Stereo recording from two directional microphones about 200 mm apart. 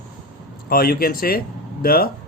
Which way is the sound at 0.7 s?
50° left (ahead or behind).